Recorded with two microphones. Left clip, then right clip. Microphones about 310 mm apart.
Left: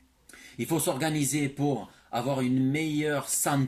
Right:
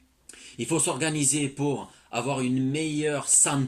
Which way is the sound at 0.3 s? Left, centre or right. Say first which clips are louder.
Right 2 dB; centre.